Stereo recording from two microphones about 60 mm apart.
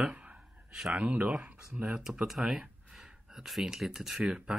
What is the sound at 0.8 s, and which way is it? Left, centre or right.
Speech, centre.